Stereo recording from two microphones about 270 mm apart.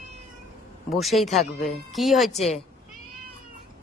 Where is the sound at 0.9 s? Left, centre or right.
Centre.